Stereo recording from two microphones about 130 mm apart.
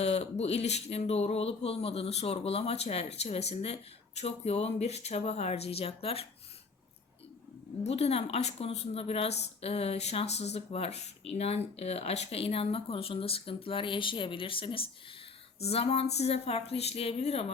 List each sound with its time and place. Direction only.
0.0 s a woman's voice: 55° left (ahead or behind)
7.9 s a woman's voice: 55° left (ahead or behind)